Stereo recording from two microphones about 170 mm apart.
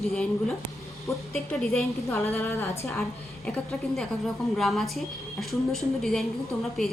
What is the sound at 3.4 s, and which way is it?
A woman's voice, 5° left (ahead or behind).